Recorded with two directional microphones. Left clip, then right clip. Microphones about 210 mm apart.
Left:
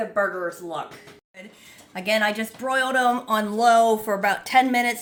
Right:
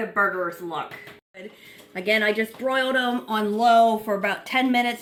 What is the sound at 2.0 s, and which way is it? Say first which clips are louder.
A woman's voice: right 1 dB; 65° left (ahead or behind).